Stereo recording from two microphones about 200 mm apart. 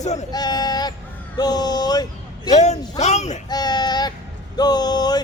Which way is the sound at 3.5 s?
20° left (ahead or behind).